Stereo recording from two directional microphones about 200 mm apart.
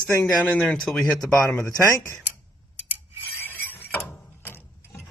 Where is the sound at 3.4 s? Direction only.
10° left (ahead or behind).